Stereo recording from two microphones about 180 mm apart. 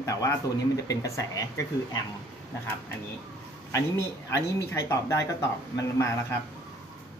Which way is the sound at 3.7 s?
15° left (ahead or behind).